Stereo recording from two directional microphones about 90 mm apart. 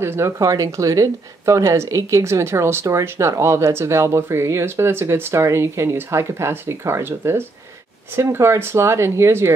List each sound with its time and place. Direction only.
0.0 s speech: 30° right (ahead or behind)